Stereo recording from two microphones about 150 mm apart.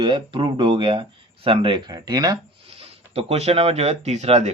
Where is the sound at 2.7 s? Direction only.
40° right (ahead or behind).